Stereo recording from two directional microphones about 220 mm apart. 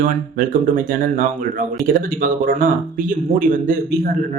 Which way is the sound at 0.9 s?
40° right (ahead or behind).